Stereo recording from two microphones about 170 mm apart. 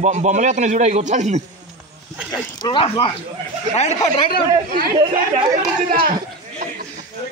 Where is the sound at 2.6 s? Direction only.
25° left (ahead or behind).